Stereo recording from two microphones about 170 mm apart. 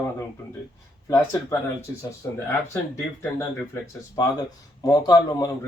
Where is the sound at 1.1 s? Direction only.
20° left (ahead or behind).